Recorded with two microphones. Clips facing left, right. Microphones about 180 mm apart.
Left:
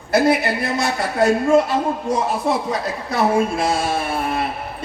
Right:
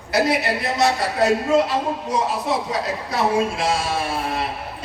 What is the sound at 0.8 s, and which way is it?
A man's voice, 50° left (ahead or behind).